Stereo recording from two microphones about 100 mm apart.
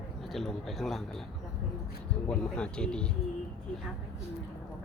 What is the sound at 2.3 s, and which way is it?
Speech, 10° left (ahead or behind).